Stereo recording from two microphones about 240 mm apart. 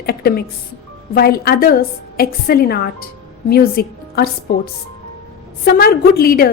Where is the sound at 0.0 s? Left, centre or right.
Left.